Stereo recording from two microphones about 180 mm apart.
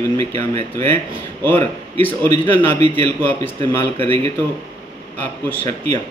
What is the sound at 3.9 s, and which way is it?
Speech, 30° right (ahead or behind).